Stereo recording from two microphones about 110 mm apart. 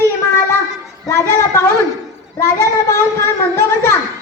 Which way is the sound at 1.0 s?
25° left (ahead or behind).